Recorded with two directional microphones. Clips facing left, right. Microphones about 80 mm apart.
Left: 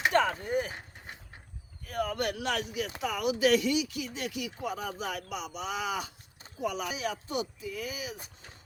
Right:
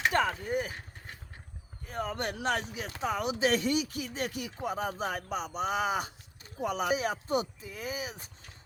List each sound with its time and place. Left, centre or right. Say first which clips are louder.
0.1 s speech: left 2 dB; centre
1.9 s speech: left 3 dB; right